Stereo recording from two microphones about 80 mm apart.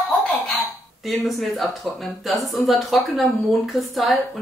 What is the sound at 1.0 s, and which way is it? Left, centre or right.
Speech, centre.